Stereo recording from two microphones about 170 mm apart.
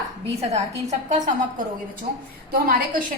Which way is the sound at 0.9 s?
45° right (ahead or behind).